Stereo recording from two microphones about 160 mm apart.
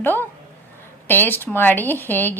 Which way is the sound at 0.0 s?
15° left (ahead or behind).